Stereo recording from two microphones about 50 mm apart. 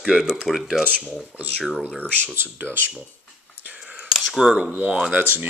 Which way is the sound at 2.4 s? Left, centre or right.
Right.